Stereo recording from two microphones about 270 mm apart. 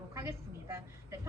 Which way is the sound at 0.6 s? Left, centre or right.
Centre.